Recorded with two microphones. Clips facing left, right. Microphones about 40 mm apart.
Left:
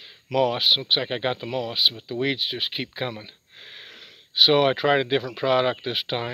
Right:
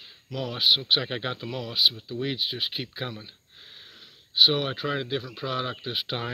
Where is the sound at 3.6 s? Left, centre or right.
Left.